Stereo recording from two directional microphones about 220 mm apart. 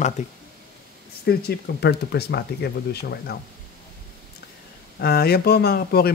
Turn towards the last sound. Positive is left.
turn(degrees=45)  # may be behind; listen again after turning